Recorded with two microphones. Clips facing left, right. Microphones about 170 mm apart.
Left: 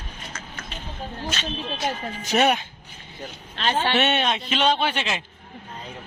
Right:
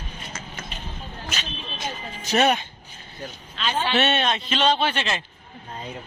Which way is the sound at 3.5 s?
60° left (ahead or behind).